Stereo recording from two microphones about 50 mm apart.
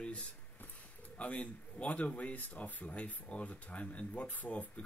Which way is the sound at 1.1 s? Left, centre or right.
Left.